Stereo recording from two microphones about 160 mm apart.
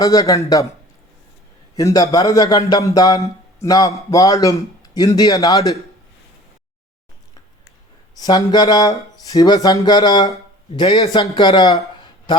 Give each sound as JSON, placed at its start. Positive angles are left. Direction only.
{"t": 0.0, "sound": "speech", "side_deg": 20}
{"t": 1.7, "sound": "speech", "side_deg": 20}
{"t": 8.1, "sound": "speech", "side_deg": 25}